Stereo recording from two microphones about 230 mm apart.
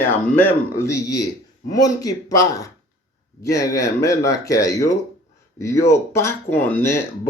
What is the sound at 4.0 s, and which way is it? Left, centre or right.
Speech, centre.